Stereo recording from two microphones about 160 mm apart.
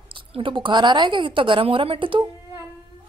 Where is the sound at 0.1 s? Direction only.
30° right (ahead or behind).